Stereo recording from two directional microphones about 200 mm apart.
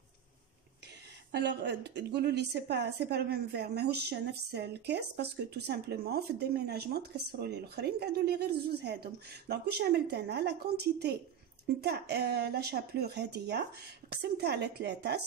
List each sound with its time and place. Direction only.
1.3 s a woman's voice: 60° right (ahead or behind)